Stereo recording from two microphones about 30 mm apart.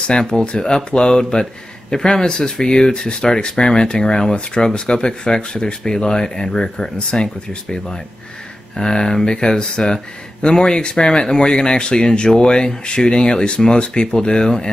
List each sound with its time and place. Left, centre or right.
0.2 s speech: left
8.7 s speech: left